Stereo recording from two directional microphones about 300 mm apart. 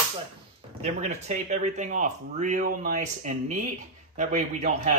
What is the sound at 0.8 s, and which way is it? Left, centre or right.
Speech, right.